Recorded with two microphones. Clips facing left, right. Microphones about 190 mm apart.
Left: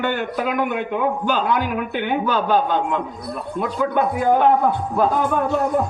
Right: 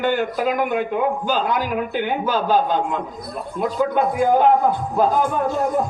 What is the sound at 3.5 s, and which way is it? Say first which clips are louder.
A man's voice: right 1 dB; 65° left (ahead or behind).